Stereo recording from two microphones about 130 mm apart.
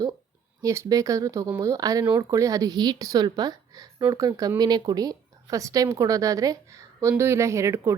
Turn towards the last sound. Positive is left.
turn(degrees=-20)  # may be behind; listen again after turning